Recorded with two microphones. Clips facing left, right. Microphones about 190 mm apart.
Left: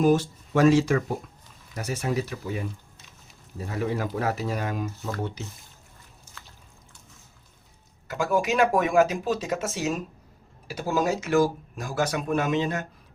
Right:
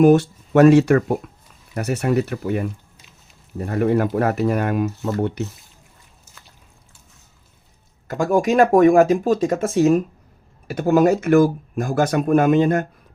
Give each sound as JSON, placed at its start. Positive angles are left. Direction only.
{"t": 0.0, "sound": "speech", "side_deg": -65}
{"t": 8.0, "sound": "speech", "side_deg": -50}